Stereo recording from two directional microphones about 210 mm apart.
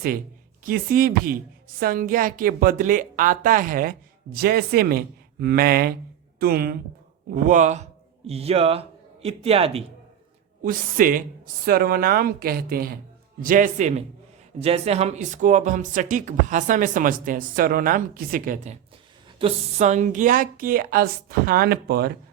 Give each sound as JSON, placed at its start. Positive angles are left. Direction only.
{"t": 0.6, "sound": "speech", "side_deg": -45}
{"t": 7.4, "sound": "a man's voice", "side_deg": -35}
{"t": 10.6, "sound": "speech", "side_deg": -40}